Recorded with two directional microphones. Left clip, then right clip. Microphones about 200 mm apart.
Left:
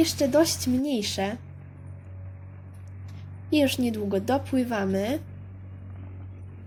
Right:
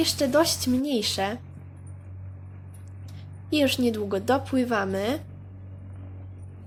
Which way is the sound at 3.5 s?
30° left (ahead or behind).